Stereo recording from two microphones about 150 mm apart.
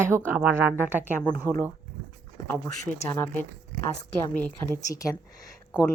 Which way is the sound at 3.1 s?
15° left (ahead or behind).